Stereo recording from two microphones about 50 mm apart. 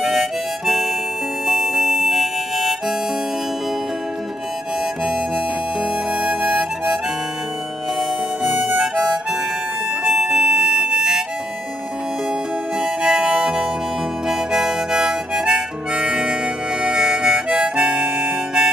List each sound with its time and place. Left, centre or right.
0.0 s harmonica: centre
5.8 s harmonica: centre
10.0 s harmonica: centre
12.8 s harmonica: centre